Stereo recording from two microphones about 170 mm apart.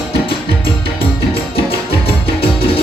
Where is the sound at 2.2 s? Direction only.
35° left (ahead or behind).